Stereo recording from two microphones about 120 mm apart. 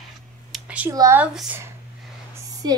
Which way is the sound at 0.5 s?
10° right (ahead or behind).